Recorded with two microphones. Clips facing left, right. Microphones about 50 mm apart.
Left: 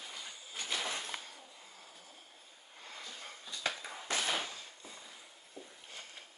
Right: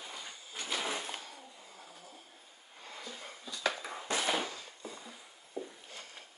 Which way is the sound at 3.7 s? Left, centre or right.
Right.